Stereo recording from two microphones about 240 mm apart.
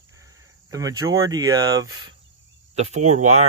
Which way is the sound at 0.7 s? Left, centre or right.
Centre.